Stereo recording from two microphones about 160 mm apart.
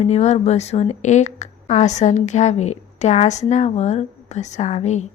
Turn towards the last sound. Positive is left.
turn(degrees=45)  # may be behind; listen again after turning